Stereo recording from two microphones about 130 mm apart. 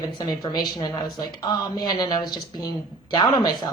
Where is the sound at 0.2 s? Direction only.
30° left (ahead or behind).